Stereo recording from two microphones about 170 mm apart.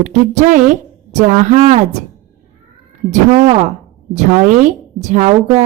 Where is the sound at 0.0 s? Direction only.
45° right (ahead or behind).